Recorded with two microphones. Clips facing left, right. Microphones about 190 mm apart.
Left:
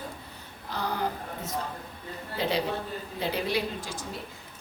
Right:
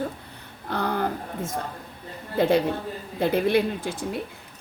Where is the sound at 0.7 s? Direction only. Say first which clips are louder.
Right 5 dB; 60° right (ahead or behind).